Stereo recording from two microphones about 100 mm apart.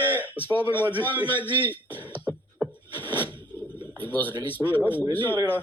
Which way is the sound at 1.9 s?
15° left (ahead or behind).